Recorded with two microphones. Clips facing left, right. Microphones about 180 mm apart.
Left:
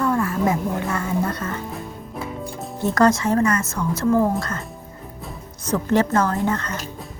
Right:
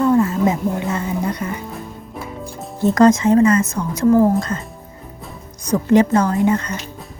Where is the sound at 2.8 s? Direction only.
20° right (ahead or behind).